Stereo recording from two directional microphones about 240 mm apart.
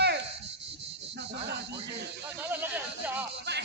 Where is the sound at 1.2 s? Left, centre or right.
Right.